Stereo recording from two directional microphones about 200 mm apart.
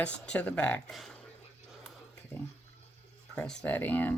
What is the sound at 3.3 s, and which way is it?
Speech, 5° left (ahead or behind).